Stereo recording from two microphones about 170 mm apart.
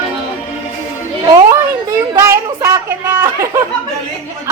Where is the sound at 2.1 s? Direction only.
15° right (ahead or behind).